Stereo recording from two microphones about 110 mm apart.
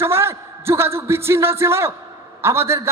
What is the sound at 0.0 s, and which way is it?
A man's voice, 25° right (ahead or behind).